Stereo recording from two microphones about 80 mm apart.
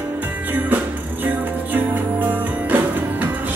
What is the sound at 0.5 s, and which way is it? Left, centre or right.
Music, right.